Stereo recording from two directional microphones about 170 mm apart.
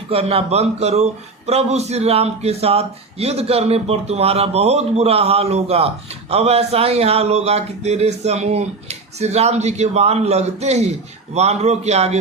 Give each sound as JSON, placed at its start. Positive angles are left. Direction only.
{"t": 0.1, "sound": "a man's voice", "side_deg": -35}